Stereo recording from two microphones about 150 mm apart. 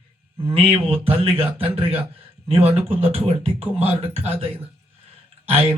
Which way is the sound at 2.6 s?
40° right (ahead or behind).